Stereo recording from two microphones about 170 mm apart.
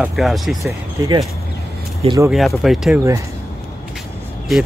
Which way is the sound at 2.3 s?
Centre (ahead or behind).